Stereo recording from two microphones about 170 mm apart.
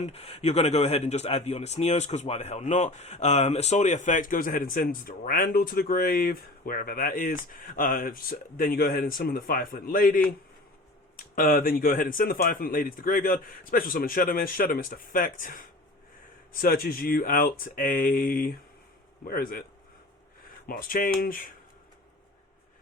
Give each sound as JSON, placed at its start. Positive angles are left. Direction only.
{"t": 0.0, "sound": "speech", "side_deg": 40}
{"t": 11.3, "sound": "speech", "side_deg": 55}
{"t": 20.7, "sound": "speech", "side_deg": 55}